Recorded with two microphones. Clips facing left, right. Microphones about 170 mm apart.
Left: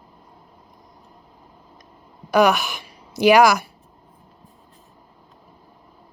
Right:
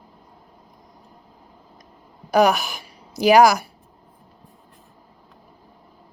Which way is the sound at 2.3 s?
35° right (ahead or behind).